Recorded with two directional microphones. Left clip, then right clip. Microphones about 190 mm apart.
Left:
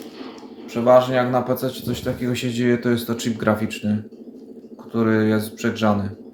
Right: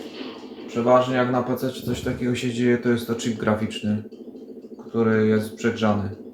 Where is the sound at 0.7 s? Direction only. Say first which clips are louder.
Left 4 dB; 45° left (ahead or behind).